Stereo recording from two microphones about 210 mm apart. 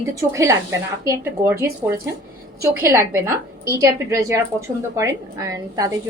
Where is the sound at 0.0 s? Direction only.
15° right (ahead or behind).